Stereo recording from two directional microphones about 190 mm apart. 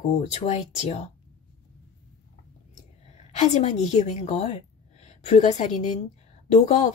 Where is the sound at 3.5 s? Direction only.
40° left (ahead or behind).